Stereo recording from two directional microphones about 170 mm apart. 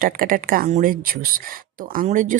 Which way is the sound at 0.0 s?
55° right (ahead or behind).